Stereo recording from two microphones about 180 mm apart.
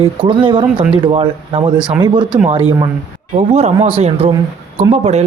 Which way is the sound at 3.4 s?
35° right (ahead or behind).